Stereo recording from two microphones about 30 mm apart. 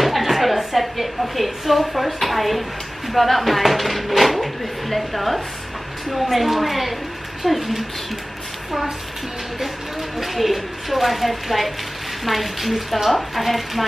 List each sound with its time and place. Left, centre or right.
0.0 s speech: centre
10.1 s speech: centre